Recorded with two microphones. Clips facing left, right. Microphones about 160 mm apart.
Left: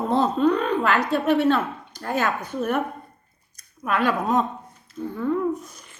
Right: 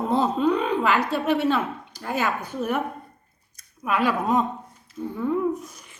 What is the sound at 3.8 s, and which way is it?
Speech, 5° right (ahead or behind).